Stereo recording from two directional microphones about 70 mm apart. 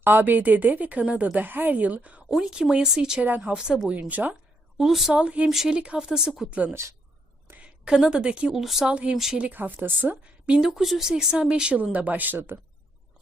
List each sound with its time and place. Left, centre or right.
0.0 s a woman's voice: right; by 3.2 s centre
3.2 s a woman's voice: right
3.5 s speech: centre
4.1 s a woman's voice: right
4.8 s a woman's voice: centre
5.1 s speech: centre
5.5 s a woman's voice: centre
5.7 s speech: centre
7.6 s speech: centre
9.4 s a woman's voice: right
10.6 s speech: centre; by 12.5 s right